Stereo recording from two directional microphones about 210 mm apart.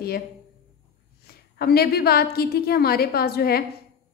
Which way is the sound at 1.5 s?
50° left (ahead or behind).